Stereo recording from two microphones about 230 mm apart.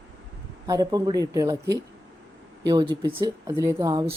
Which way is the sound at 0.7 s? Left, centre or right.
Centre.